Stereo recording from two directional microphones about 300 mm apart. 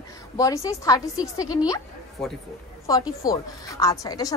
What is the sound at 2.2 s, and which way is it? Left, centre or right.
Speech, centre.